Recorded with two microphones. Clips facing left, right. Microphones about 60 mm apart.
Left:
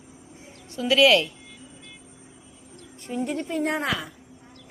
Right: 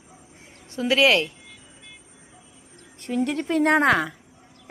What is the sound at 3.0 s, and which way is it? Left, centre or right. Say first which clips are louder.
A woman's voice: right 4 dB; right.